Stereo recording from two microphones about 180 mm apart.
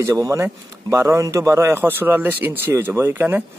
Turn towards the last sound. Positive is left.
turn(degrees=-10)  # may be behind; listen again after turning